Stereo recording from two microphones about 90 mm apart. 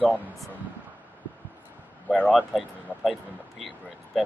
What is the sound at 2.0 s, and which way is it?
Speech, 15° left (ahead or behind).